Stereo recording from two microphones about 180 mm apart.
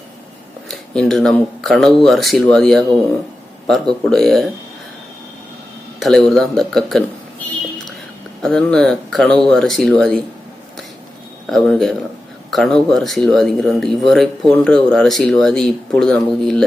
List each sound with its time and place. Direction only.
0.7 s speech: 5° left (ahead or behind)
6.0 s speech: 5° left (ahead or behind)
8.4 s speech: 5° left (ahead or behind)
11.4 s speech: centre (ahead or behind)